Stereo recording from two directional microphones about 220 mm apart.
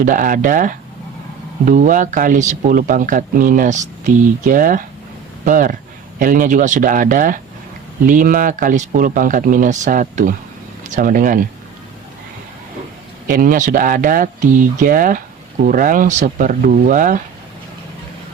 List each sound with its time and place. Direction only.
0.0 s speech: 35° right (ahead or behind)
13.2 s speech: 40° right (ahead or behind)